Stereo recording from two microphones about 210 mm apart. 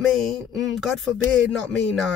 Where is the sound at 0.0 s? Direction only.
Centre (ahead or behind).